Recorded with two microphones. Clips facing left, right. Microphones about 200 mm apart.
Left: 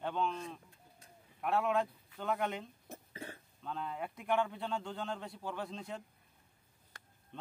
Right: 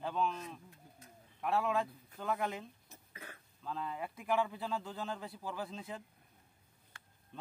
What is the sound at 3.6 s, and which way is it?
A man's voice, centre (ahead or behind).